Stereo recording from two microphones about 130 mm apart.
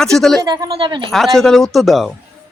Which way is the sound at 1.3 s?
5° left (ahead or behind).